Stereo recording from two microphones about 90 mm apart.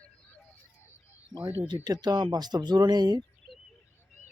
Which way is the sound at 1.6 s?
50° right (ahead or behind).